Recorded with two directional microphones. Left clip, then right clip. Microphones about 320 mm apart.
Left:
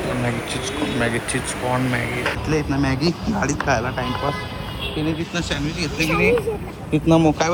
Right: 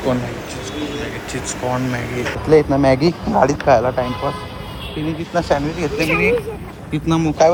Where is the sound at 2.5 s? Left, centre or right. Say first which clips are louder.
Right 14 dB; centre.